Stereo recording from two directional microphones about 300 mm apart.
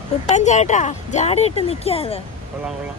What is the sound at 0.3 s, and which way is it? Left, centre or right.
Speech, left.